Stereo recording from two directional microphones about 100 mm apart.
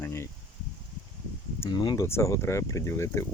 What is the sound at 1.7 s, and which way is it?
Speech, 50° left (ahead or behind).